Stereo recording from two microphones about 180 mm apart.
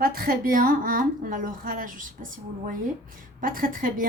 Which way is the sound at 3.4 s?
50° right (ahead or behind).